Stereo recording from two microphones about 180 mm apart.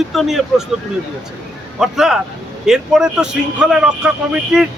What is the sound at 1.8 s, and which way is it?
Speech, centre (ahead or behind).